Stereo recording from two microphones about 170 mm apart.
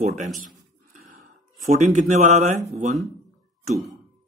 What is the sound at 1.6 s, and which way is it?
Speech, 45° right (ahead or behind).